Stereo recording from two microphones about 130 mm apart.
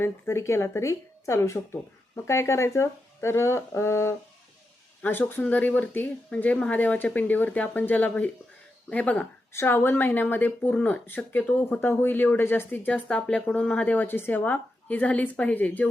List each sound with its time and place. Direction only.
0.0 s speech: 20° left (ahead or behind)